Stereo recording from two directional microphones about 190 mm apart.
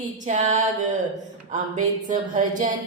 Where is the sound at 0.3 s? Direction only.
40° right (ahead or behind).